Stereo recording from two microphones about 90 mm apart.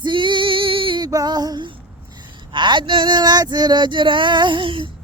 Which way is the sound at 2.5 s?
60° right (ahead or behind).